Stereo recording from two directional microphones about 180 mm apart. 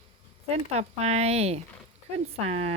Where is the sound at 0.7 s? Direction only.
35° right (ahead or behind).